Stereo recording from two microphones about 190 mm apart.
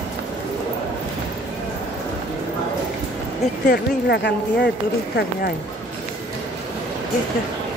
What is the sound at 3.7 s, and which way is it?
Speech, 65° left (ahead or behind).